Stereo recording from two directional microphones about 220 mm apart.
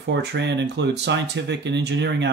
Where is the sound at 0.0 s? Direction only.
50° right (ahead or behind).